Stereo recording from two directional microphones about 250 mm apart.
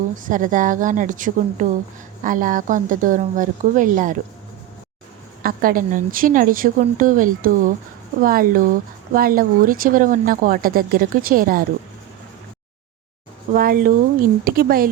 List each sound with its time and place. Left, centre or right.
0.2 s speech: right
5.4 s speech: right
13.5 s speech: right